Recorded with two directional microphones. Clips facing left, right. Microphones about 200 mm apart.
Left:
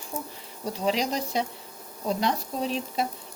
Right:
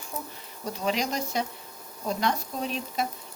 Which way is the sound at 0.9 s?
30° left (ahead or behind).